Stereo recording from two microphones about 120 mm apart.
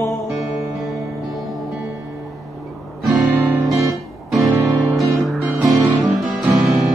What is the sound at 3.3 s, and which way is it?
Music, 15° right (ahead or behind).